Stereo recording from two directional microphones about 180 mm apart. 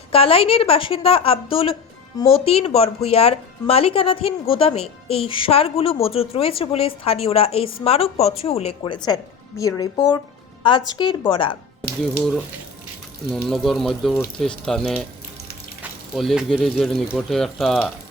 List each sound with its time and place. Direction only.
0.1 s speech: 30° left (ahead or behind)
9.0 s speech: 20° left (ahead or behind)
13.3 s speech: centre (ahead or behind)